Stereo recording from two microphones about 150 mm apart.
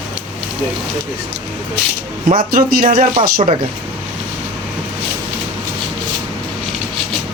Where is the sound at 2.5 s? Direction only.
70° right (ahead or behind).